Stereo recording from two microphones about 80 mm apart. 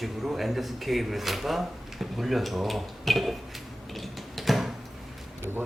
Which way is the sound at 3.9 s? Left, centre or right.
Centre.